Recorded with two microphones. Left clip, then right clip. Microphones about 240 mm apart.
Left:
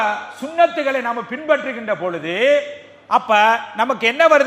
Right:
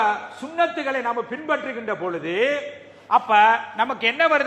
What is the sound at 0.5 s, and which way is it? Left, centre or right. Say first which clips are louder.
A man's voice: left 6 dB; left.